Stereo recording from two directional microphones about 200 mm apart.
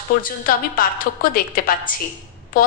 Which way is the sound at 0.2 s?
45° left (ahead or behind).